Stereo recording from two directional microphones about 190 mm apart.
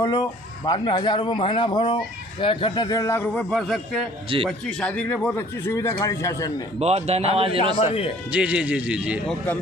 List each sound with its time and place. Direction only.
0.0 s a man's voice: 20° left (ahead or behind)
6.7 s a man's voice: 35° right (ahead or behind)
8.3 s speech: 5° right (ahead or behind)